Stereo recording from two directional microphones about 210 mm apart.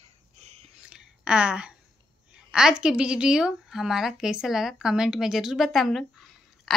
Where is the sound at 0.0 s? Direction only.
30° right (ahead or behind).